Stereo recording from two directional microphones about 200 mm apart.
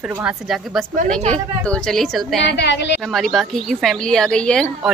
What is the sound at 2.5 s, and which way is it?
Speech, 60° left (ahead or behind).